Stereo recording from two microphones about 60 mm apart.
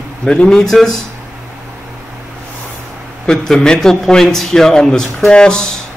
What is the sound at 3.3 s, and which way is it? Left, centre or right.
A man's voice, centre.